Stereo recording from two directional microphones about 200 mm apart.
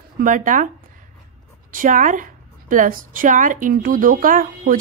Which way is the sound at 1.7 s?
40° right (ahead or behind).